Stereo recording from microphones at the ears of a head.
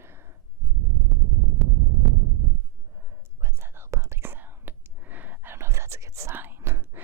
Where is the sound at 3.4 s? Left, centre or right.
Right.